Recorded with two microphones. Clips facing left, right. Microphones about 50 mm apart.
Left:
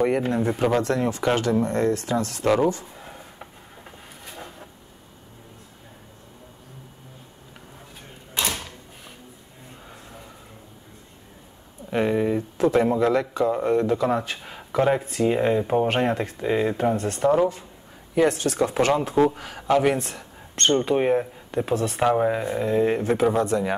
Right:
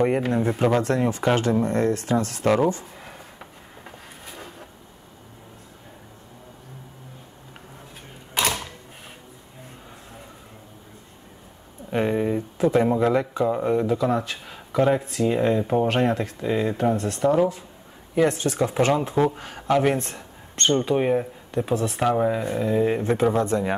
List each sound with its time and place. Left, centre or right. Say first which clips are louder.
0.3 s a man's voice: right 1 dB; centre
0.8 s speech: right 1 dB; right
2.4 s speech: even; centre
2.7 s a sound: right 1 dB; right
4.3 s a sound: left 1 dB; centre
11.9 s speech: left 1 dB; centre
12.9 s a man's voice: even; centre
13.5 s speech: left 1 dB; centre
22.0 s speech: left 1 dB; centre